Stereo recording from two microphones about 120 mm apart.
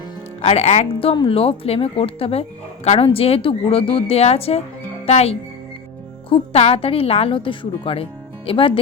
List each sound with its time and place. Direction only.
0.4 s speech: 60° left (ahead or behind)